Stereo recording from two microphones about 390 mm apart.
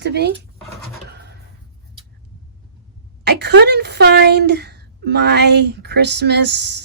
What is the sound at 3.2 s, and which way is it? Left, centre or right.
A woman's voice, right.